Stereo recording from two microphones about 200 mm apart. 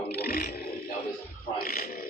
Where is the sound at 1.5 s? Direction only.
50° left (ahead or behind).